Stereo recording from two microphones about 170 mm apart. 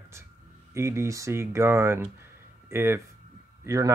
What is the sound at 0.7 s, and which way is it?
Speech, 15° right (ahead or behind).